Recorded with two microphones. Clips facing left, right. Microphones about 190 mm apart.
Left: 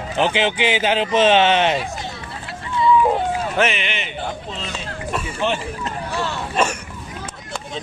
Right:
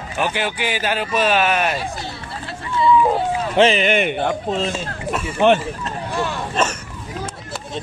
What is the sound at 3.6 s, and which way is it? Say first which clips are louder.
Speech: right 7 dB; 30° right (ahead or behind).